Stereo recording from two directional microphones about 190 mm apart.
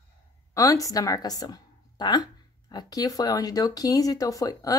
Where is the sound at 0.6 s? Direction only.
20° left (ahead or behind).